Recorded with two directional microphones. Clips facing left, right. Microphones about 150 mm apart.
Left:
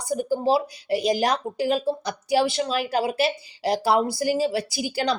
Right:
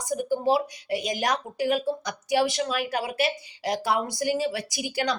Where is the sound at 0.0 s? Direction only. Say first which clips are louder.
Left 2 dB; 30° left (ahead or behind).